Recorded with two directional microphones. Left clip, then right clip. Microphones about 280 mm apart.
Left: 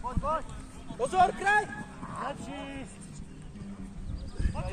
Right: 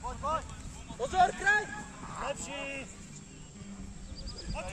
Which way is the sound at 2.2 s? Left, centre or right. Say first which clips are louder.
Right 5 dB; right.